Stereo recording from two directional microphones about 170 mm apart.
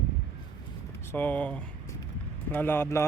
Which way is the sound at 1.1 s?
10° left (ahead or behind).